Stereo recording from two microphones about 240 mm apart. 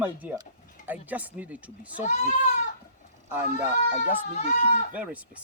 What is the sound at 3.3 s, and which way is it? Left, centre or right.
Speech, centre.